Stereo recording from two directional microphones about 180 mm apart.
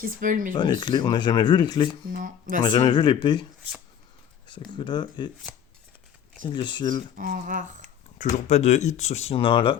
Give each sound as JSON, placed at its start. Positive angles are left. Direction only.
{"t": 0.0, "sound": "speech", "side_deg": -50}
{"t": 0.5, "sound": "speech", "side_deg": 25}
{"t": 2.1, "sound": "speech", "side_deg": -50}
{"t": 2.6, "sound": "speech", "side_deg": 25}
{"t": 4.4, "sound": "speech", "side_deg": 25}
{"t": 6.4, "sound": "speech", "side_deg": 25}
{"t": 7.2, "sound": "speech", "side_deg": -50}
{"t": 8.4, "sound": "speech", "side_deg": 40}